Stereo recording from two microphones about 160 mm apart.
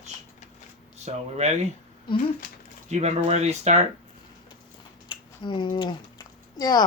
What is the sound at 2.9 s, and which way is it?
Speech, 45° right (ahead or behind).